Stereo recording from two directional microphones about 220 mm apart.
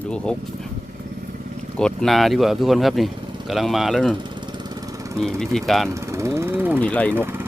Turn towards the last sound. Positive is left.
turn(degrees=-10)  # may be behind; listen again after turning